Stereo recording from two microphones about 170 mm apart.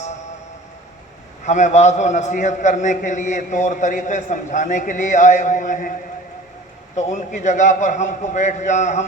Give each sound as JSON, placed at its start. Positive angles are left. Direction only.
{"t": 0.0, "sound": "a sound", "side_deg": 45}
{"t": 1.5, "sound": "a man's voice", "side_deg": 45}
{"t": 6.9, "sound": "a man's voice", "side_deg": 45}